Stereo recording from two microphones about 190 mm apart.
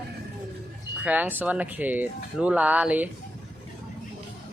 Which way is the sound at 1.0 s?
10° right (ahead or behind).